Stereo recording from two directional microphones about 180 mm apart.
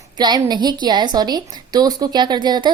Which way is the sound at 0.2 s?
25° right (ahead or behind).